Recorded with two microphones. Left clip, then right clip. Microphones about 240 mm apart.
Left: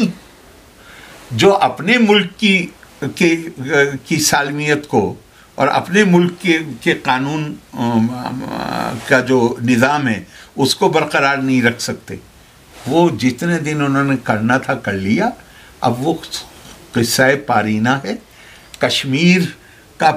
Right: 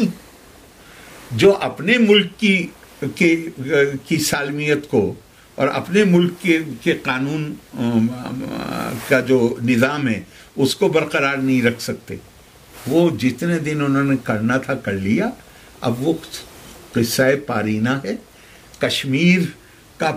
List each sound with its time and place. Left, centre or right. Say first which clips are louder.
1.3 s speech: left 3 dB; centre